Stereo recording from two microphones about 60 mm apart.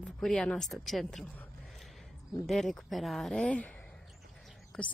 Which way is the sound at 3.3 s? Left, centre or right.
Centre.